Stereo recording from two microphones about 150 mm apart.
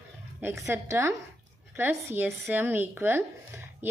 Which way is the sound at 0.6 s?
20° right (ahead or behind).